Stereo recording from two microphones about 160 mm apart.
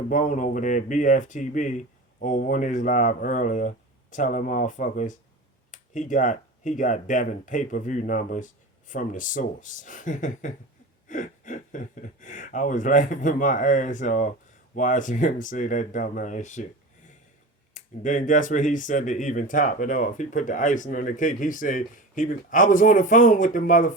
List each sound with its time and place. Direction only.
0.1 s speech: 55° left (ahead or behind)
17.7 s speech: 50° left (ahead or behind)